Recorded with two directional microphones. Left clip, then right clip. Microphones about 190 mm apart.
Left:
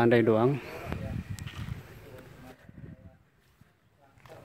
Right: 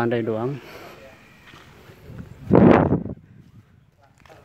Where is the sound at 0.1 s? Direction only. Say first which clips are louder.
Left 1 dB; 10° left (ahead or behind).